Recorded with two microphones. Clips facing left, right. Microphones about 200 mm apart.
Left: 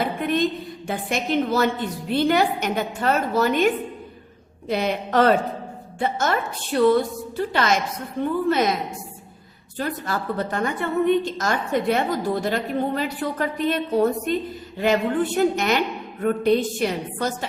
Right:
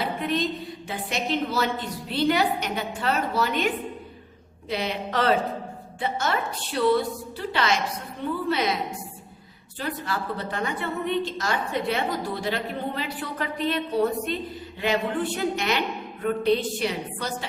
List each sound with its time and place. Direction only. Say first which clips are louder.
0.0 s a sound: left 4 dB; 50° left (ahead or behind)
0.9 s a woman's voice: left 4 dB; 50° left (ahead or behind)
4.7 s a woman's voice: left 6 dB; 50° left (ahead or behind)
9.7 s a woman's voice: left 3 dB; 45° left (ahead or behind)